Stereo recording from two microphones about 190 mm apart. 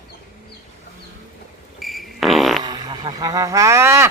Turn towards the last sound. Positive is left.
turn(degrees=-15)  # may be behind; listen again after turning